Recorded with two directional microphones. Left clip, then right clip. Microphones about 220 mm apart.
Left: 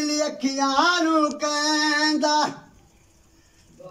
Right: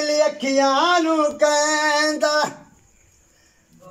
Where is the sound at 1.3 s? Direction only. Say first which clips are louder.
Right 6 dB; 45° right (ahead or behind).